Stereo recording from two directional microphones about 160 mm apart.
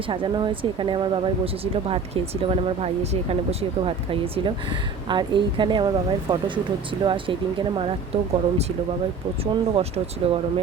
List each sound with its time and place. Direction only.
0.1 s a woman's voice: 30° right (ahead or behind)